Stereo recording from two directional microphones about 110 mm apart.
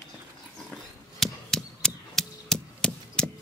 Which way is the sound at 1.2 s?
5° left (ahead or behind).